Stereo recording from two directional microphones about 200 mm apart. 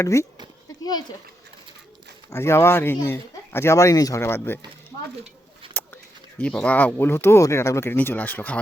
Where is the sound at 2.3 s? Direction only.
15° left (ahead or behind).